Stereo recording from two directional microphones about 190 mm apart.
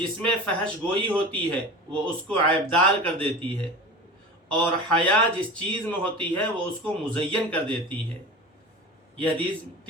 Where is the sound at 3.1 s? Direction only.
30° right (ahead or behind).